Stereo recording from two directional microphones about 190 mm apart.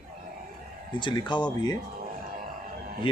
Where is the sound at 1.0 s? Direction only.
25° left (ahead or behind).